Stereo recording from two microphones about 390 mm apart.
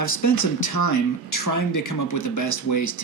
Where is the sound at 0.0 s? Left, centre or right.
Left.